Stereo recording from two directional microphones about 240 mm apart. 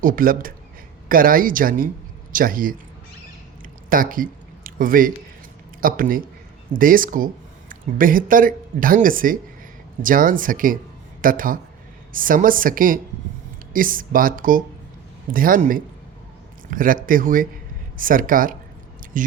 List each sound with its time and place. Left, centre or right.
0.0 s speech: right
3.8 s speech: right